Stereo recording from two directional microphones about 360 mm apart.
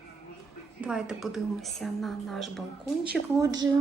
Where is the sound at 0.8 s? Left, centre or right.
Centre.